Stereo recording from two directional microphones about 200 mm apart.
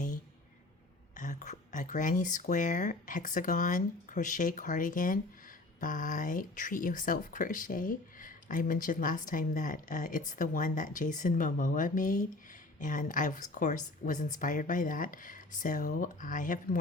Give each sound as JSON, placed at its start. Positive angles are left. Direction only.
{"t": 1.1, "sound": "speech", "side_deg": 40}